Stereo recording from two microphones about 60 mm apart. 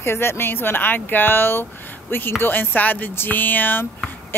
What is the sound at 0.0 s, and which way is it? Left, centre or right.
Speech, left.